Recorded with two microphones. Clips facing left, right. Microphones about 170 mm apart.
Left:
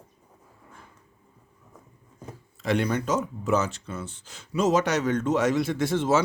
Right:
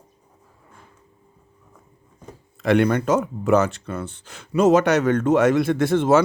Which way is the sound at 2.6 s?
60° right (ahead or behind).